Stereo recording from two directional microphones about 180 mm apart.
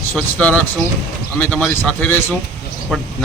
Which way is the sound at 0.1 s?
5° left (ahead or behind).